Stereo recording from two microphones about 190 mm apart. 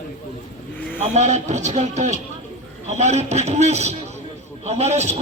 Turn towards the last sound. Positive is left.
turn(degrees=-35)  # may be behind; listen again after turning